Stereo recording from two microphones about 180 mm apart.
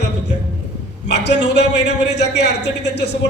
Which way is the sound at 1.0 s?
75° left (ahead or behind).